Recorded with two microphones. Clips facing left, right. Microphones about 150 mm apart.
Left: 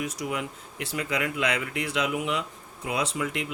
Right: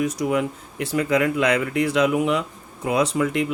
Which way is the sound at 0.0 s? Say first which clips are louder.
Right 9 dB; 45° right (ahead or behind).